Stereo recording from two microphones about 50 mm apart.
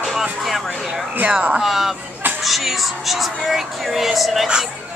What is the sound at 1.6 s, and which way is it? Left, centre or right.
Speech, centre.